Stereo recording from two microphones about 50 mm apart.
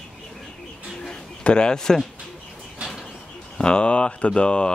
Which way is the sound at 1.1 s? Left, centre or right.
Centre.